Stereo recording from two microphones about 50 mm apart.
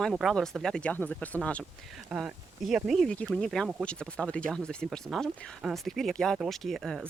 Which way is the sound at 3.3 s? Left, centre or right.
Centre.